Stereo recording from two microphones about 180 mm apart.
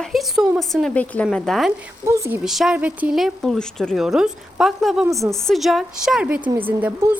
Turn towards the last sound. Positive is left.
turn(degrees=-10)  # may be behind; listen again after turning